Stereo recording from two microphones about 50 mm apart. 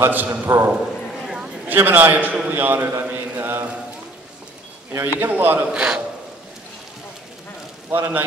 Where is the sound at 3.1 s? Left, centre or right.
Right.